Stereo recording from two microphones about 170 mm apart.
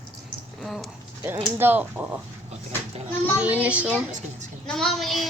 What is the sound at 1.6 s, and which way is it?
Speech, 10° right (ahead or behind).